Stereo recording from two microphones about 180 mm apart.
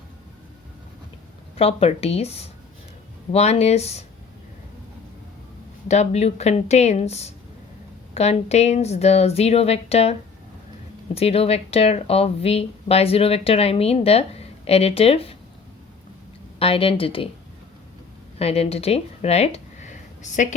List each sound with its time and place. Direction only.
1.5 s speech: 35° left (ahead or behind)
5.9 s speech: 40° left (ahead or behind)
16.6 s speech: 30° left (ahead or behind)
18.3 s speech: 35° left (ahead or behind)